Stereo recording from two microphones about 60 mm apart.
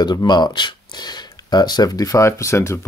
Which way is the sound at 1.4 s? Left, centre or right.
Left.